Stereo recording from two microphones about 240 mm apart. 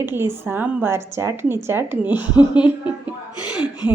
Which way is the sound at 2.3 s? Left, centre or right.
Centre.